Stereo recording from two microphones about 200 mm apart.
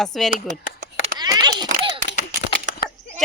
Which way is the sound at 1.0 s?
20° right (ahead or behind).